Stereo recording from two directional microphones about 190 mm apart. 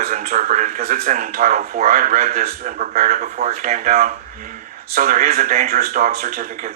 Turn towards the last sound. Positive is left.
turn(degrees=-45)  # may be behind; listen again after turning